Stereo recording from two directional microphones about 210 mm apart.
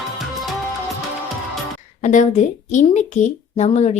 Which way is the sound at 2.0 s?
35° left (ahead or behind).